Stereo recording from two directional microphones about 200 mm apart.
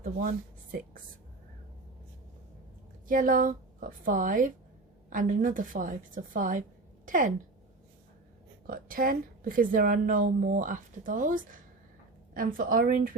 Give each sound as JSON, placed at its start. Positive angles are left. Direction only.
{"t": 0.0, "sound": "speech", "side_deg": -45}
{"t": 3.1, "sound": "a woman's voice", "side_deg": -45}
{"t": 8.6, "sound": "a woman's voice", "side_deg": -45}